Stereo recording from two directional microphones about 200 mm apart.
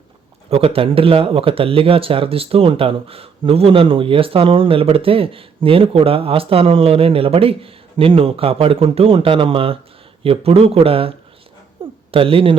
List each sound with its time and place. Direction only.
0.5 s speech: 30° right (ahead or behind)
11.8 s a sound: 25° right (ahead or behind)
12.1 s speech: 25° right (ahead or behind)